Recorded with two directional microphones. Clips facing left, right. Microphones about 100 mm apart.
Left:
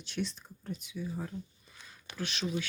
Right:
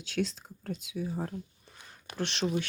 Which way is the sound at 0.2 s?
90° right.